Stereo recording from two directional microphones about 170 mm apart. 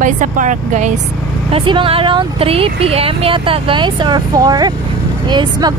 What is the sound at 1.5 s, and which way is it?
Speech, 30° right (ahead or behind).